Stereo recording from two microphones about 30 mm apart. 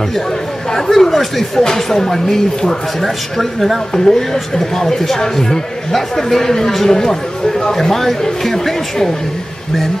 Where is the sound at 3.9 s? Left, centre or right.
Centre.